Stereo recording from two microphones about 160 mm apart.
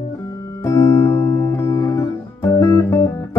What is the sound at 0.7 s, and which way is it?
Music, 20° left (ahead or behind).